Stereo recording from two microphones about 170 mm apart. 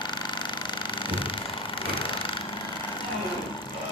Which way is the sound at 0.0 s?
25° left (ahead or behind).